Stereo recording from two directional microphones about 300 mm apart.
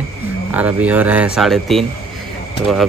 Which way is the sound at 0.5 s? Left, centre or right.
Centre.